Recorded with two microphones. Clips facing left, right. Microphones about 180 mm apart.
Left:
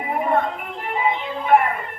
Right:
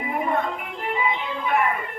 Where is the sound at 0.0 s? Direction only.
45° left (ahead or behind).